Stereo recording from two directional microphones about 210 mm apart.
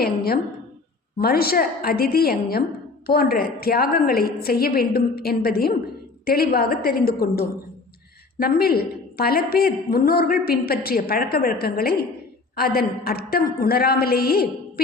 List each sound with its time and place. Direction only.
1.2 s a woman's voice: 45° left (ahead or behind)